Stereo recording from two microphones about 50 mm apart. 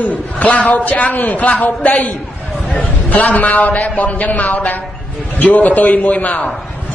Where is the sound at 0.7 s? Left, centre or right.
Left.